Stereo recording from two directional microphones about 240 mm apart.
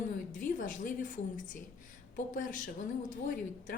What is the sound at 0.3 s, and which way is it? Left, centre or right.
A woman's voice, left.